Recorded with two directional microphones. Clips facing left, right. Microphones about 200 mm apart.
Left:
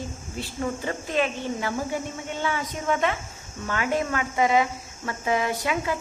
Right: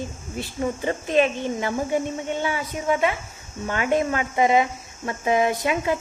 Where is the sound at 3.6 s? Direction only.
20° right (ahead or behind).